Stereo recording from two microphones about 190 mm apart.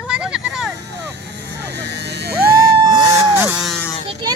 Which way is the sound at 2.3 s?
55° right (ahead or behind).